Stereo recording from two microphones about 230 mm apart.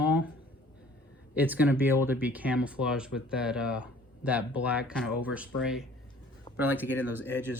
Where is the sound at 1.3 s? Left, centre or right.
Centre.